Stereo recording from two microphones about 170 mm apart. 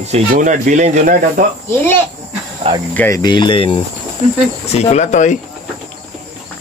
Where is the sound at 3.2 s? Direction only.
25° left (ahead or behind); by 5.4 s 45° left (ahead or behind).